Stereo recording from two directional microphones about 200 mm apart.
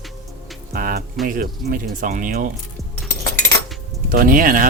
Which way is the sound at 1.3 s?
45° right (ahead or behind).